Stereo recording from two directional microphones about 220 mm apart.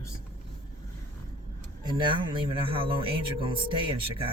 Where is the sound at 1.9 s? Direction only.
20° right (ahead or behind).